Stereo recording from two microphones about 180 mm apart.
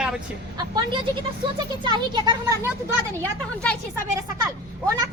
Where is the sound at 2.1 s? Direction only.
25° right (ahead or behind).